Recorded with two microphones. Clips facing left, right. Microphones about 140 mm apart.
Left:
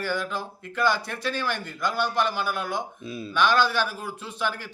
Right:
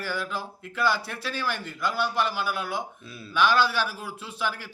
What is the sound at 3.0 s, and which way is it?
Speech, 15° left (ahead or behind).